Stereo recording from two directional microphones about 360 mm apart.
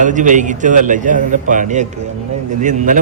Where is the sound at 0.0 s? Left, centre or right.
Right.